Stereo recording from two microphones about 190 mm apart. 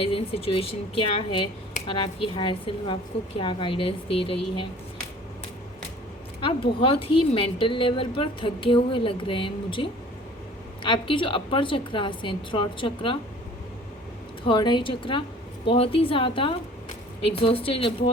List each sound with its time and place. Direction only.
0.0 s a woman's voice: 30° left (ahead or behind)
6.4 s a woman's voice: 25° left (ahead or behind)
10.8 s a woman's voice: 25° left (ahead or behind)
14.4 s a woman's voice: 25° left (ahead or behind)